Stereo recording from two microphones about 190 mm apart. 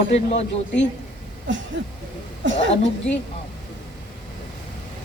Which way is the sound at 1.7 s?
70° right (ahead or behind).